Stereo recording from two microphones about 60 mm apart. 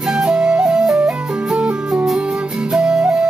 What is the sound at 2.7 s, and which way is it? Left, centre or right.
Flute, centre.